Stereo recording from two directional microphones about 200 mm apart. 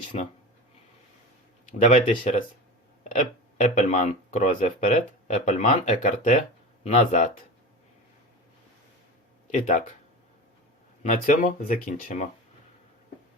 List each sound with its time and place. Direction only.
0.1 s speech: 35° left (ahead or behind)
1.8 s speech: 35° left (ahead or behind)
3.6 s speech: 35° left (ahead or behind)
9.5 s speech: 35° left (ahead or behind)
11.0 s speech: 40° left (ahead or behind)